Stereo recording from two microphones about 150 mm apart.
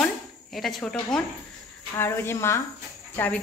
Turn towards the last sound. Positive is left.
turn(degrees=10)  # may be behind; listen again after turning